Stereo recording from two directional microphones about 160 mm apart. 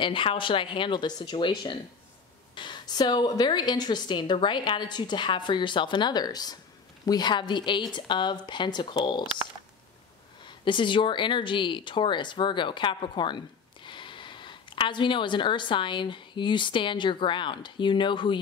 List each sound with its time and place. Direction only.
0.0 s speech: 35° left (ahead or behind)
2.5 s a woman's voice: 30° left (ahead or behind)
10.4 s speech: 30° left (ahead or behind)